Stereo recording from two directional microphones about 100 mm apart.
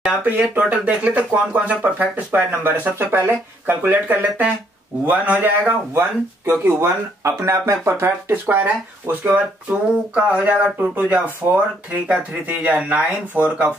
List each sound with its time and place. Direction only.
0.0 s speech: 15° right (ahead or behind)